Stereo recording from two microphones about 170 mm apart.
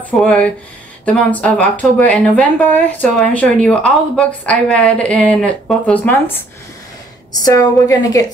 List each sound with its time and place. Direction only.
0.2 s speech: 5° left (ahead or behind)
7.3 s a woman's voice: 20° left (ahead or behind)